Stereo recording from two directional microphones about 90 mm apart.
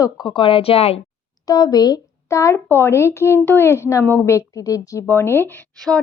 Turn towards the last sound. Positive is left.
turn(degrees=20)  # may be behind; listen again after turning